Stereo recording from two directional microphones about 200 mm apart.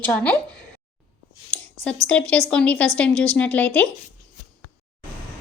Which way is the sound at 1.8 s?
5° left (ahead or behind).